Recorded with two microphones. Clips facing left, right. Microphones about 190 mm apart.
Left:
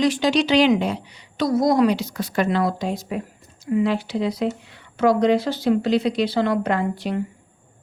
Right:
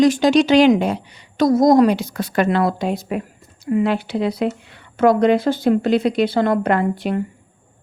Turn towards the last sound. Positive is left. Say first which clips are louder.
# right 4 dB
turn(degrees=-55)  # may be behind; listen again after turning